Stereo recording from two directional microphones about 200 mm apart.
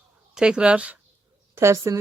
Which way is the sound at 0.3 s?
5° right (ahead or behind).